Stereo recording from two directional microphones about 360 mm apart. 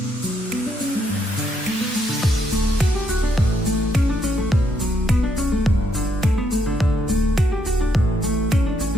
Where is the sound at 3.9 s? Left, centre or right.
Centre.